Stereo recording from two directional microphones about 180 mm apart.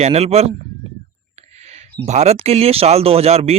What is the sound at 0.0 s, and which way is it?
Speech, 35° right (ahead or behind).